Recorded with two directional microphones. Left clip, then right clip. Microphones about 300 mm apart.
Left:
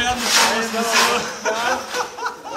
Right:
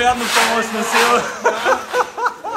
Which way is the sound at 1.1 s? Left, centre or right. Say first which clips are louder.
Right 5 dB; centre.